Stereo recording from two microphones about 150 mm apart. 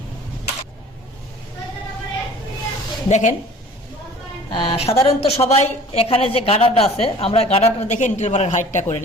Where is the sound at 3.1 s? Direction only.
50° left (ahead or behind).